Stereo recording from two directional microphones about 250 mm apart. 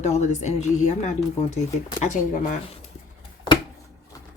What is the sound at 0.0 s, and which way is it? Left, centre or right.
Speech, left.